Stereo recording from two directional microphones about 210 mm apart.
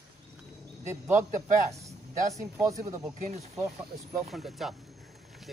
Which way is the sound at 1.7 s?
15° right (ahead or behind).